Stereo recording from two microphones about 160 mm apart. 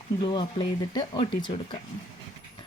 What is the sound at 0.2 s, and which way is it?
Speech, 30° left (ahead or behind).